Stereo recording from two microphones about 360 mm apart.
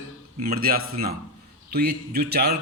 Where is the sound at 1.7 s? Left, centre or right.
Right.